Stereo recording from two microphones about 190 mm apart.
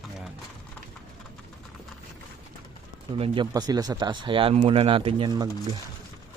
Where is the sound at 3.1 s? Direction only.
30° right (ahead or behind).